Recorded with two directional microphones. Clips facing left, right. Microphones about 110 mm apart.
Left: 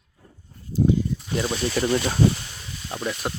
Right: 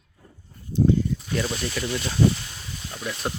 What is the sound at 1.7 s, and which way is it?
Speech, 45° left (ahead or behind).